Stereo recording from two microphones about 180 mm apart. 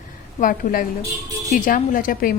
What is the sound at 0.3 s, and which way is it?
A woman's voice, 50° left (ahead or behind).